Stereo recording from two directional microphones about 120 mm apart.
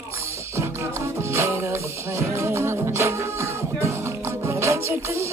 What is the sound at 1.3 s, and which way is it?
Music, 25° right (ahead or behind).